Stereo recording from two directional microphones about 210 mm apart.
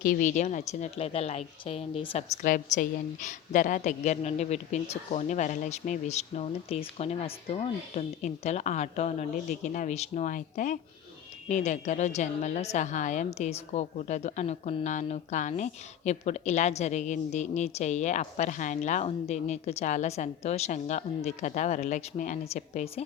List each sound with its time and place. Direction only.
0.0 s a woman's voice: 40° left (ahead or behind)
2.4 s a woman's voice: 40° left (ahead or behind)